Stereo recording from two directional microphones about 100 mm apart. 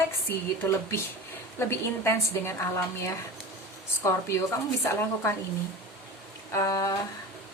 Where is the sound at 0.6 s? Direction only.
25° left (ahead or behind).